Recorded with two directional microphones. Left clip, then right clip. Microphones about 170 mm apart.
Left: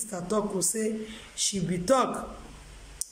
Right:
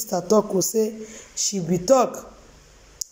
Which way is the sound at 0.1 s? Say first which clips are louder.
Right 12 dB; 15° right (ahead or behind).